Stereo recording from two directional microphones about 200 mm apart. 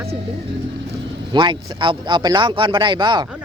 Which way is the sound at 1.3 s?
20° right (ahead or behind).